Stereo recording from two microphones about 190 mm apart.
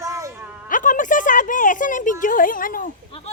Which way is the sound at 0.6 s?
45° left (ahead or behind).